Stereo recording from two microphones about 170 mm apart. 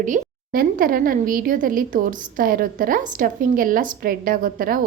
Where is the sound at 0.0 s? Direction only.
55° right (ahead or behind).